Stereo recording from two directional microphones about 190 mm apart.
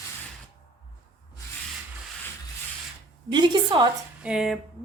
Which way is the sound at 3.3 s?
25° right (ahead or behind).